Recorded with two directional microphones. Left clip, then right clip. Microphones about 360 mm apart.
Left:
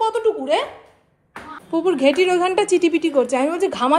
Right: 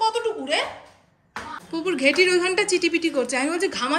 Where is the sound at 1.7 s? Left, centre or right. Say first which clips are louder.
Left 5 dB; centre.